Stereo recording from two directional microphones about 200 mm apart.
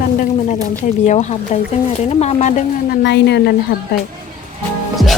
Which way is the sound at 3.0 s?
60° left (ahead or behind).